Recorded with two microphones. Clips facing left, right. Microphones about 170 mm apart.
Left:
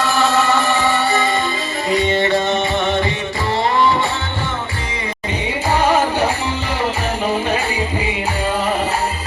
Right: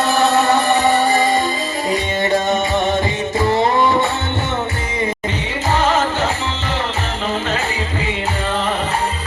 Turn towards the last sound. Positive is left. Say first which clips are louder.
# left 3 dB
turn(degrees=10)  # may be behind; listen again after turning